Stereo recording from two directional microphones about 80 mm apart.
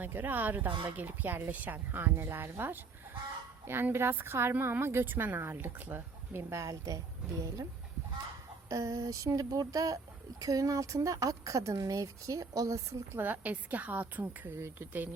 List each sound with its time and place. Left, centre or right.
0.0 s a woman's voice: right
8.7 s speech: right
13.1 s a woman's voice: right